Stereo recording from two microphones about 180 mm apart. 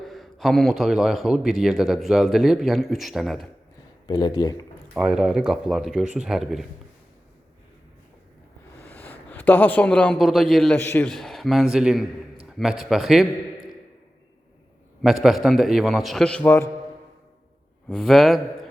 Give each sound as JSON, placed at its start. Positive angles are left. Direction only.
{"t": 0.0, "sound": "a man's voice", "side_deg": 0}
{"t": 4.0, "sound": "speech", "side_deg": 20}
{"t": 4.9, "sound": "a man's voice", "side_deg": -5}
{"t": 8.9, "sound": "a man's voice", "side_deg": 10}
{"t": 15.0, "sound": "a man's voice", "side_deg": 0}
{"t": 17.8, "sound": "a man's voice", "side_deg": 5}